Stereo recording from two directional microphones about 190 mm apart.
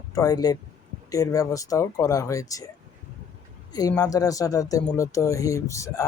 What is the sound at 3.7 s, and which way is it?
Speech, 20° left (ahead or behind).